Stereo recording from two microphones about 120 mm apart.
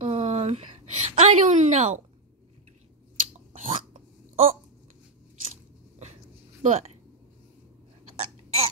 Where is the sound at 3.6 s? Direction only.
90° right.